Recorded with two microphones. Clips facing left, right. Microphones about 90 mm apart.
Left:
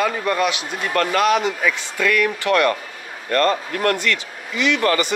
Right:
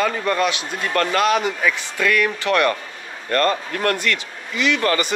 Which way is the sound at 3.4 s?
30° left (ahead or behind).